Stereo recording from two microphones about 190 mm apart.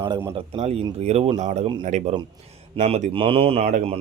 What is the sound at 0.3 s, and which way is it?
Speech, 30° right (ahead or behind).